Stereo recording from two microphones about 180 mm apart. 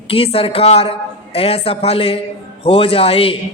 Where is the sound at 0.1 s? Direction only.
30° left (ahead or behind).